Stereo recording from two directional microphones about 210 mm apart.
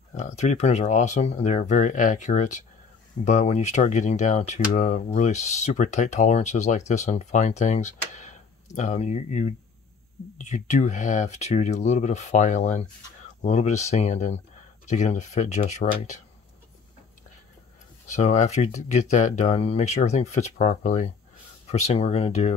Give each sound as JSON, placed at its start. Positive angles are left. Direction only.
{"t": 0.1, "sound": "speech", "side_deg": 35}
{"t": 18.1, "sound": "speech", "side_deg": 35}